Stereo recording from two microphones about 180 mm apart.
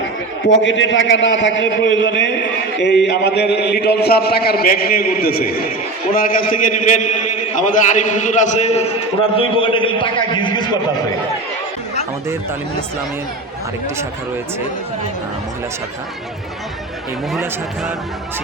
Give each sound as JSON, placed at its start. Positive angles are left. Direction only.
{"t": 0.4, "sound": "a man's voice", "side_deg": 90}
{"t": 3.1, "sound": "a man's voice", "side_deg": 65}